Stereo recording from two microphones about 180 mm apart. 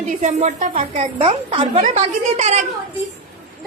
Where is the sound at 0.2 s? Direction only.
40° right (ahead or behind).